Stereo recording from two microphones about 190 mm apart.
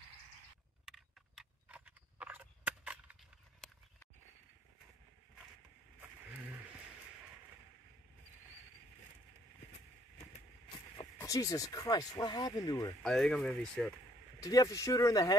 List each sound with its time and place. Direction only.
0.8 s a sound: 5° right (ahead or behind)
11.1 s speech: 15° left (ahead or behind)
13.0 s speech: centre (ahead or behind)
14.4 s speech: 20° left (ahead or behind)